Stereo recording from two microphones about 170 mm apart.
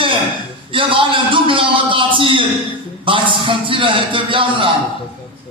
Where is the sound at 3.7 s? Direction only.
30° right (ahead or behind).